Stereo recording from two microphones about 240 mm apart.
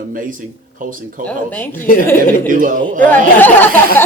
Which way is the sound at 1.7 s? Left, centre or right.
Left.